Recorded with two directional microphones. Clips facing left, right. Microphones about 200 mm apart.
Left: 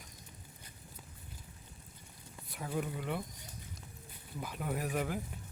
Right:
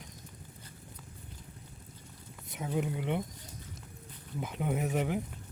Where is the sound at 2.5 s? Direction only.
20° right (ahead or behind).